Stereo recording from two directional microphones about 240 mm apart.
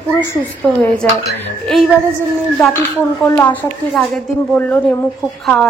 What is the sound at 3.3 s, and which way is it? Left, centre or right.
Speech, centre.